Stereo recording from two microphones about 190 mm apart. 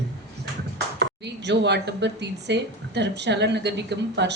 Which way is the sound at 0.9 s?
65° right (ahead or behind).